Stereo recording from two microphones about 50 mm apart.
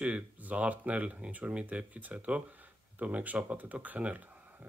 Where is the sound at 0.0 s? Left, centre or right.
Right.